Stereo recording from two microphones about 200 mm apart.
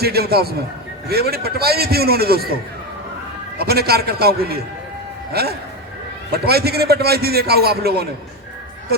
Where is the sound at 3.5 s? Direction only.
50° right (ahead or behind).